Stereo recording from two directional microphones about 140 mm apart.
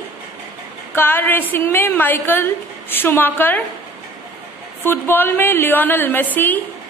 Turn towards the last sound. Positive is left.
turn(degrees=15)  # may be behind; listen again after turning